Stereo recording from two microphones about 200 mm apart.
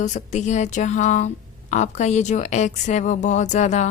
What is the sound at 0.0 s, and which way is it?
Speech, 35° left (ahead or behind).